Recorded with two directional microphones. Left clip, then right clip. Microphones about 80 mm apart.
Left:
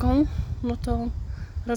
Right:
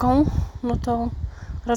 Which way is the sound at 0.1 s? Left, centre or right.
Centre.